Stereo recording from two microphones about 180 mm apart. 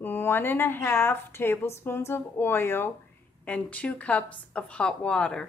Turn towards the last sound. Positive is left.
turn(degrees=5)  # may be behind; listen again after turning